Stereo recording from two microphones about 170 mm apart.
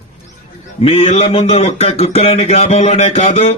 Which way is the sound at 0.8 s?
35° left (ahead or behind).